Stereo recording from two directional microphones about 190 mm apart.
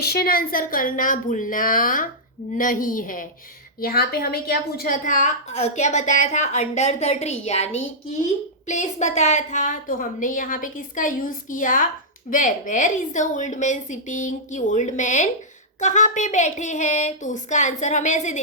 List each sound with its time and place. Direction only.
0.0 s a woman's voice: 55° left (ahead or behind); by 18.4 s 40° left (ahead or behind)